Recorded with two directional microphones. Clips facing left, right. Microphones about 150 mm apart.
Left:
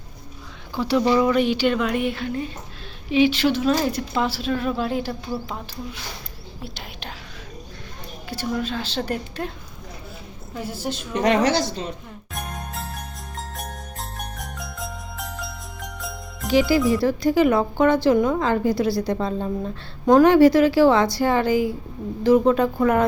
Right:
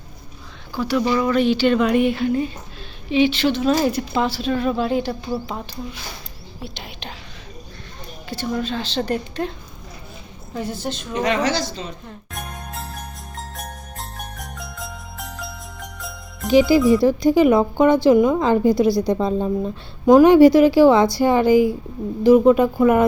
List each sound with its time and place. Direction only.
0.8 s speech: 25° left (ahead or behind); by 2.5 s 5° right (ahead or behind)
3.1 s a woman's voice: 5° left (ahead or behind)
3.7 s speech: 5° right (ahead or behind)
8.3 s a woman's voice: 10° left (ahead or behind)
10.5 s a woman's voice: 5° left (ahead or behind)
11.2 s a woman's voice: 60° left (ahead or behind)
12.3 s jingle bell: centre (ahead or behind)
16.5 s a woman's voice: 20° right (ahead or behind)